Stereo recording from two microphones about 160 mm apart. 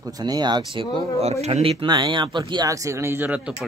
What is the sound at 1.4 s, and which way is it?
Speech, 40° right (ahead or behind).